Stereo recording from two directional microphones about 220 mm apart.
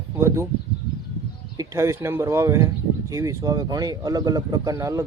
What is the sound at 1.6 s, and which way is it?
Speech, 10° right (ahead or behind).